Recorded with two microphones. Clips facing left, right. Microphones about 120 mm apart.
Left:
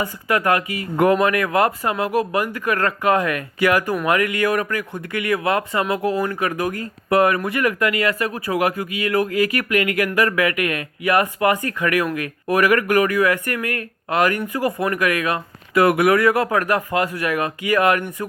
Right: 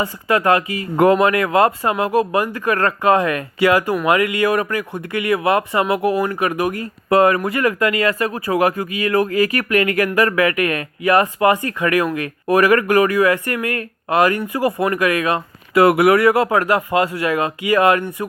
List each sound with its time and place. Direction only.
0.0 s speech: 35° right (ahead or behind)